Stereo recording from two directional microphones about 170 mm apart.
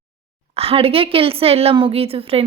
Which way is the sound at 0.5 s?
35° right (ahead or behind).